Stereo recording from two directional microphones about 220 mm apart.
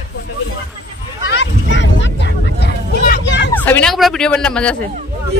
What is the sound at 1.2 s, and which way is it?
Vehicle, 55° left (ahead or behind).